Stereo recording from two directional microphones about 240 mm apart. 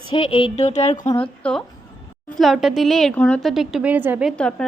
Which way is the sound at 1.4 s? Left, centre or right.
Centre.